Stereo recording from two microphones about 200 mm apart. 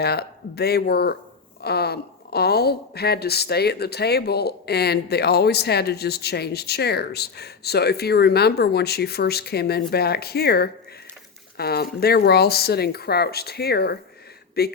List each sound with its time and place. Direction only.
0.0 s a woman's voice: 55° left (ahead or behind)